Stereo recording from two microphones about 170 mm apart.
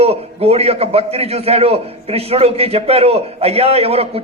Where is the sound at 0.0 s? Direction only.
35° right (ahead or behind).